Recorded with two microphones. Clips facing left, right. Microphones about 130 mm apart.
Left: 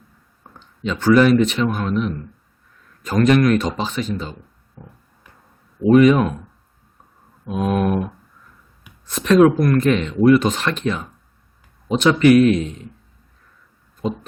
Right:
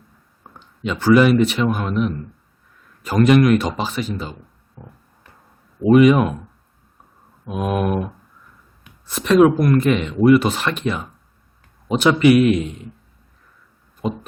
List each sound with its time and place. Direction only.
0.8 s speech: 10° right (ahead or behind)
5.9 s speech: 10° right (ahead or behind)
7.4 s speech: 5° right (ahead or behind)
9.0 s speech: 5° right (ahead or behind)